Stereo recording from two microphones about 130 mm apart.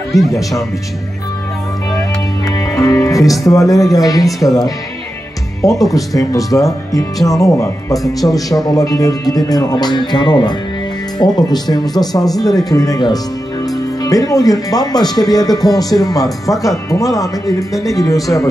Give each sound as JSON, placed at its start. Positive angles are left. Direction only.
{"t": 0.3, "sound": "speech", "side_deg": 25}
{"t": 2.4, "sound": "speech", "side_deg": 25}